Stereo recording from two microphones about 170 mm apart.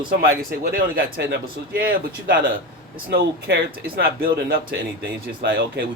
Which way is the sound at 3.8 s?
60° right (ahead or behind).